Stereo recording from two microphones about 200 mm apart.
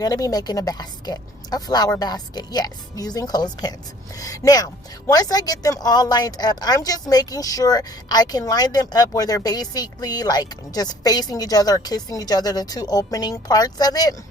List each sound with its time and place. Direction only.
0.0 s speech: 15° left (ahead or behind)